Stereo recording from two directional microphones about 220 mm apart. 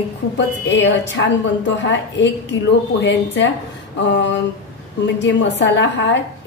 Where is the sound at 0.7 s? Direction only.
55° left (ahead or behind).